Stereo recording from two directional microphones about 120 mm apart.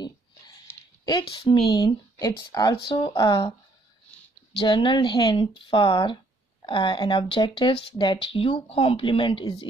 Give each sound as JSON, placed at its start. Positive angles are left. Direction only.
{"t": 1.0, "sound": "speech", "side_deg": 40}
{"t": 2.9, "sound": "speech", "side_deg": 45}
{"t": 4.6, "sound": "speech", "side_deg": 45}